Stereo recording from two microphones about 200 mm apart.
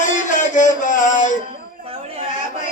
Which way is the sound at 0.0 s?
40° left (ahead or behind).